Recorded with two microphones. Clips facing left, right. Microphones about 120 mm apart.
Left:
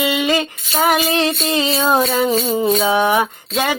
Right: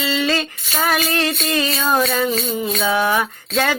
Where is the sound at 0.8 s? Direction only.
20° left (ahead or behind).